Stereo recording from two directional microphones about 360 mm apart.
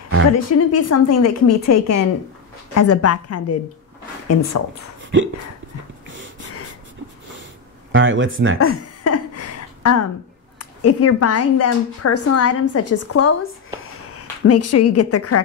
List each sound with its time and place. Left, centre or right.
0.3 s a woman's voice: left
7.9 s speech: right
8.5 s a sound: left
10.6 s a woman's voice: left
14.5 s a woman's voice: left